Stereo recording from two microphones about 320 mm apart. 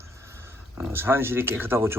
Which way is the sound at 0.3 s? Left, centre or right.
Centre.